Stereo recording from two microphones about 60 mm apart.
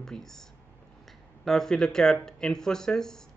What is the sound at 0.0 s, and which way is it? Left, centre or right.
Speech, centre.